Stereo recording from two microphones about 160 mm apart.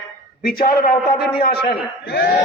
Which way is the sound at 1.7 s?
70° left (ahead or behind).